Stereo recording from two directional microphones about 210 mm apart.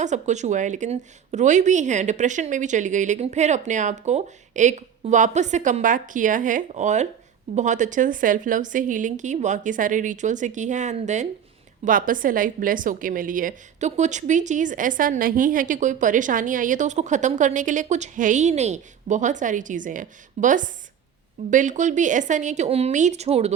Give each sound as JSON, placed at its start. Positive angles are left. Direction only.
{"t": 0.0, "sound": "a woman's voice", "side_deg": -35}